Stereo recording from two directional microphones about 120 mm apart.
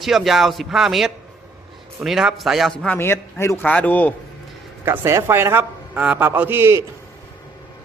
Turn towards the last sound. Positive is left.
turn(degrees=-20)  # may be behind; listen again after turning